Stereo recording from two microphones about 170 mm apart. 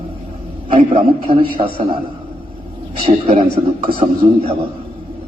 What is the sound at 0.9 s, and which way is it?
A man's voice, 35° right (ahead or behind).